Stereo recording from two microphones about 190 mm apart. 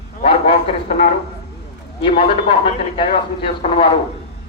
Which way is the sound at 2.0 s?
30° left (ahead or behind).